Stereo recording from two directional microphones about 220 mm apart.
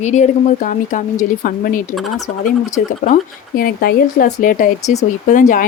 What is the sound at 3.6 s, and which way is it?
Speech, 40° left (ahead or behind).